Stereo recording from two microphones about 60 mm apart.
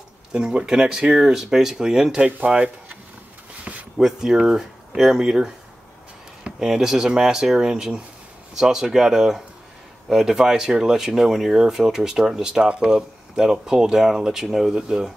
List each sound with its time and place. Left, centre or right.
0.3 s speech: centre
2.2 s speech: right
3.7 s a sound: centre
4.0 s speech: centre